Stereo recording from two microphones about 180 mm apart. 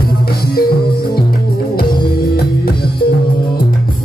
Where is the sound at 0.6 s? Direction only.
55° left (ahead or behind).